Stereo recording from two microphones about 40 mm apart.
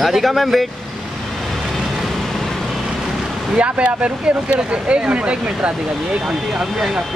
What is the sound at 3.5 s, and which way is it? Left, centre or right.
Speech, right.